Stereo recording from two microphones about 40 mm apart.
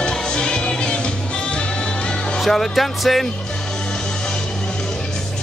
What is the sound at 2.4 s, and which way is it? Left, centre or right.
Speech, centre.